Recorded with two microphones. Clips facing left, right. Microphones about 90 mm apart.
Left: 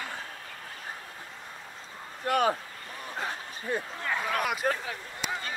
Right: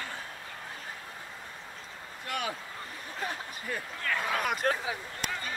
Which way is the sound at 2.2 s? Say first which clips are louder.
Left 9 dB; 40° left (ahead or behind).